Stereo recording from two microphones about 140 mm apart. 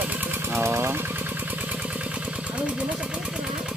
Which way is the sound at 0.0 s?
15° right (ahead or behind).